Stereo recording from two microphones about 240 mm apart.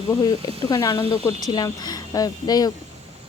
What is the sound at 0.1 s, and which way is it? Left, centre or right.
Speech, centre.